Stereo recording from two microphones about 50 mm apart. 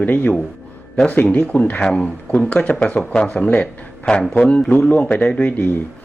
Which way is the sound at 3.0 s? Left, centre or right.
Centre.